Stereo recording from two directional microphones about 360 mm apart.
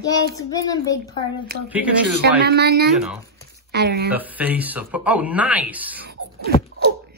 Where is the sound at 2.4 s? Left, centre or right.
Right.